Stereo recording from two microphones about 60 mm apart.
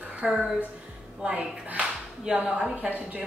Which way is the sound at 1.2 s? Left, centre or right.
Centre.